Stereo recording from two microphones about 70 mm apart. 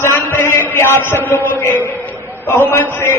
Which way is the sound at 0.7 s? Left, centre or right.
Left.